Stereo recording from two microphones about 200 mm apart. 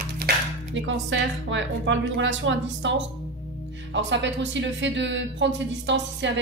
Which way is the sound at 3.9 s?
65° right (ahead or behind).